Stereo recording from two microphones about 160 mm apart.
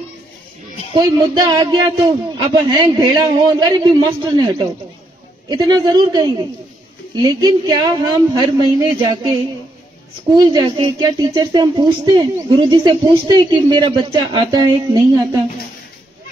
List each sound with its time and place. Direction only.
0.9 s speech: 25° right (ahead or behind)
10.3 s speech: 25° right (ahead or behind)